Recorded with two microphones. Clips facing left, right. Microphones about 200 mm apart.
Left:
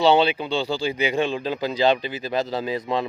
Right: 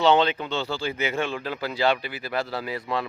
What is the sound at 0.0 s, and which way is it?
Speech, 10° left (ahead or behind).